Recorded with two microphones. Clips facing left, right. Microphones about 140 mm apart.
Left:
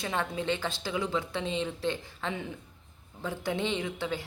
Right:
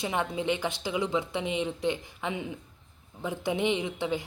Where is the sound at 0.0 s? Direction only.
15° right (ahead or behind).